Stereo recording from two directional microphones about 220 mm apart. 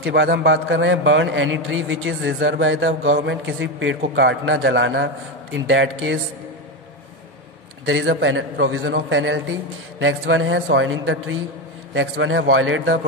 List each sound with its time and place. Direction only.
0.0 s a man's voice: 50° right (ahead or behind)
7.8 s a man's voice: 60° right (ahead or behind)